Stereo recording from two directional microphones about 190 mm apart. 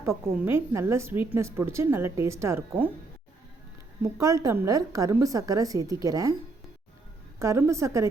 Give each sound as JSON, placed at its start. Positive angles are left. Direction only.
{"t": 0.0, "sound": "a woman's voice", "side_deg": -15}
{"t": 4.0, "sound": "a woman's voice", "side_deg": -15}
{"t": 7.3, "sound": "a woman's voice", "side_deg": -15}